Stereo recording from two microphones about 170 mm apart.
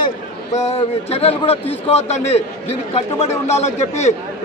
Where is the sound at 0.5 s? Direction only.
40° left (ahead or behind).